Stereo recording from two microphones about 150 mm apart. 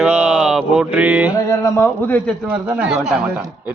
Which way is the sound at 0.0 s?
5° right (ahead or behind).